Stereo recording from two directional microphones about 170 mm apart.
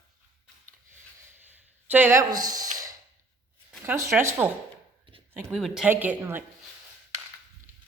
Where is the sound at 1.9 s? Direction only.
15° right (ahead or behind).